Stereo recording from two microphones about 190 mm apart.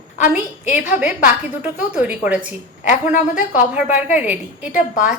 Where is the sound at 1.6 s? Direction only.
10° right (ahead or behind).